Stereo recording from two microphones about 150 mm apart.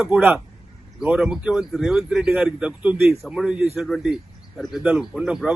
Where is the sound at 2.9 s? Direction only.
15° right (ahead or behind).